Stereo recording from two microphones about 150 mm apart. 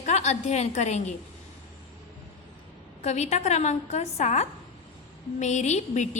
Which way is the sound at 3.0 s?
50° left (ahead or behind).